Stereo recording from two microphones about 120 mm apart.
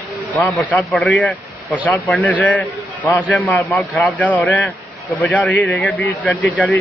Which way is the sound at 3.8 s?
Centre (ahead or behind).